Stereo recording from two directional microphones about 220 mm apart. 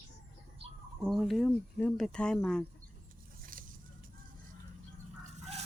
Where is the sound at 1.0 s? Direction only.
Centre (ahead or behind).